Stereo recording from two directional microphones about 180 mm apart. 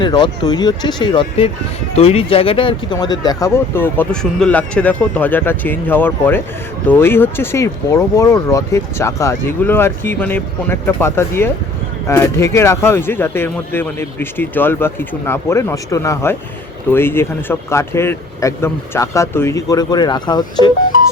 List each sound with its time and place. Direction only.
0.0 s speech: 25° left (ahead or behind)